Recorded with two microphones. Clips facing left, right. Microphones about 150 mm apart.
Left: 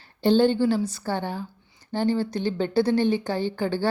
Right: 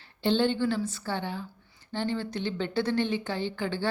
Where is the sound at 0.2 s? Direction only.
40° left (ahead or behind).